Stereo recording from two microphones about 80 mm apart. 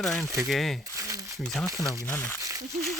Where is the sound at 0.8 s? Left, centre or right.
Right.